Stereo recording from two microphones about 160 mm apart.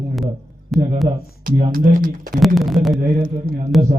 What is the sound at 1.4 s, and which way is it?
Speech, 65° right (ahead or behind).